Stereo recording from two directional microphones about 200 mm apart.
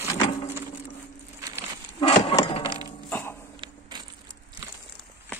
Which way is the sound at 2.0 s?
25° left (ahead or behind).